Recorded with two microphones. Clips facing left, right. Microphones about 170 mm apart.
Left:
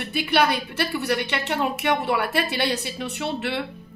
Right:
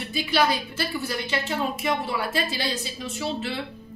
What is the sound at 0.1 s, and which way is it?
A woman's voice, 65° left (ahead or behind).